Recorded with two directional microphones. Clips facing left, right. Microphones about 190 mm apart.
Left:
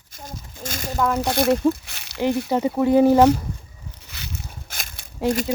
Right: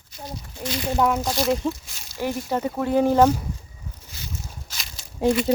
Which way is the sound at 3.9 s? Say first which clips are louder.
Left 1 dB; 75° left (ahead or behind).